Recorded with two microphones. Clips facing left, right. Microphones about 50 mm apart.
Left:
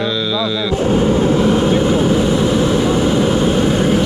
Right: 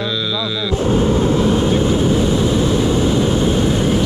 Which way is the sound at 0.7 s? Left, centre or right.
Left.